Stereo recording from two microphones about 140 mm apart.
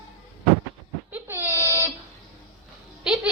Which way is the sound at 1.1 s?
15° right (ahead or behind).